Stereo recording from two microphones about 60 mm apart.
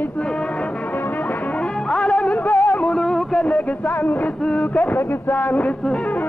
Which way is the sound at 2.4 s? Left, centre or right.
Left.